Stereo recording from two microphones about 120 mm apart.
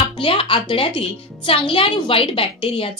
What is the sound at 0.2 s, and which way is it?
Speech, 50° left (ahead or behind).